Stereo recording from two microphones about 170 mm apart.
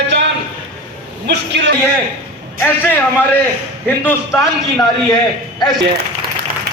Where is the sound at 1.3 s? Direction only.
90° right.